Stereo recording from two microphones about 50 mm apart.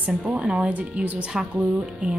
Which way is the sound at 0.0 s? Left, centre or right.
Right.